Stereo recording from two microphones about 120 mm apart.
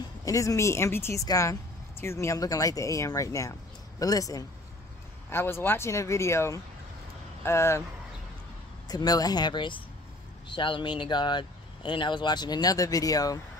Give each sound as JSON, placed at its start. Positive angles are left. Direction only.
{"t": 0.2, "sound": "speech", "side_deg": 30}
{"t": 5.3, "sound": "speech", "side_deg": 20}
{"t": 8.8, "sound": "speech", "side_deg": 30}